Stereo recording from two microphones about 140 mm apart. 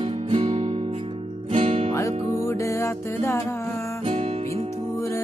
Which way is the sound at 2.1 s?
50° right (ahead or behind).